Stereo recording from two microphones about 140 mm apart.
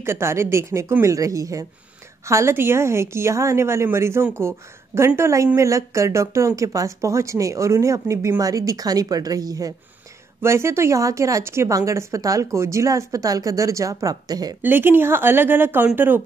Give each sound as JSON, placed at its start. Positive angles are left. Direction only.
{"t": 0.0, "sound": "speech", "side_deg": -20}
{"t": 14.6, "sound": "a woman's voice", "side_deg": -15}